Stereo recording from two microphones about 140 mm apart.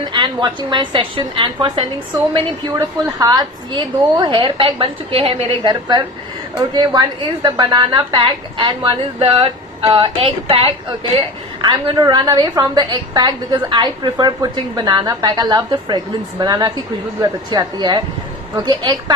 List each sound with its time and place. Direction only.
0.0 s a woman's voice: 30° right (ahead or behind)
11.6 s a woman's voice: 30° right (ahead or behind)